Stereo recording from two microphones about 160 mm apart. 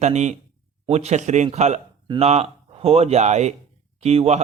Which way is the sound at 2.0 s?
30° right (ahead or behind).